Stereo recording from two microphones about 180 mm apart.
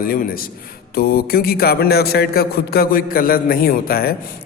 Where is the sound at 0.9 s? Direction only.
55° left (ahead or behind).